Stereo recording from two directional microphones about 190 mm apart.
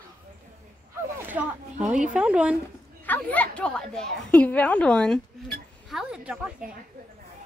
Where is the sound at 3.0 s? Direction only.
10° left (ahead or behind).